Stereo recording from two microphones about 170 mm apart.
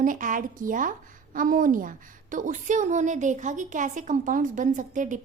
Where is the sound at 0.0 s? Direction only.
50° right (ahead or behind).